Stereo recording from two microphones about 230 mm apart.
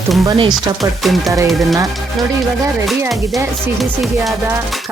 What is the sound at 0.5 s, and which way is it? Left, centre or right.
Speech, centre.